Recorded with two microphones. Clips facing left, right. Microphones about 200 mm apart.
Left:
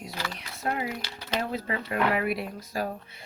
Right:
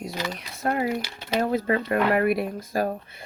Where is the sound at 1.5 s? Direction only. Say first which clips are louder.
Right 8 dB; 50° right (ahead or behind).